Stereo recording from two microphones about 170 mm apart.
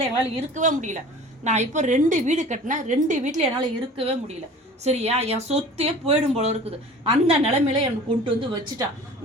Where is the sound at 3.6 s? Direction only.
35° right (ahead or behind).